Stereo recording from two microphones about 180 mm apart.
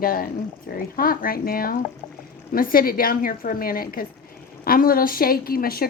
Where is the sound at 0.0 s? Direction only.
55° left (ahead or behind).